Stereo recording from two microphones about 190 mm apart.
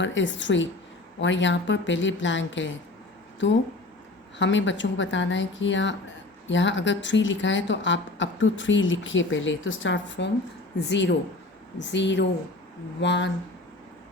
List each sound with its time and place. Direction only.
0.0 s speech: 75° left (ahead or behind)
4.4 s speech: 75° left (ahead or behind)